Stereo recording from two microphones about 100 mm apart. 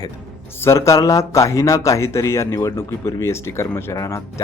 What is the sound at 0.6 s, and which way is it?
Speech, 30° left (ahead or behind).